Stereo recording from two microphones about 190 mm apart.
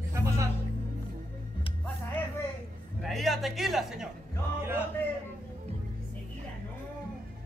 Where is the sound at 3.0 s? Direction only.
Centre (ahead or behind).